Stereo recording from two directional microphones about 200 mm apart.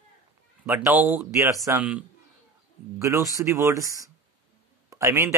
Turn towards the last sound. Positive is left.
turn(degrees=-15)  # may be behind; listen again after turning